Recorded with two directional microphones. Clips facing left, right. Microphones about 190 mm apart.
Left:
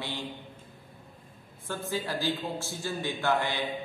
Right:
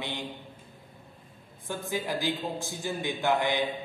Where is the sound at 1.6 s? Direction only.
15° right (ahead or behind).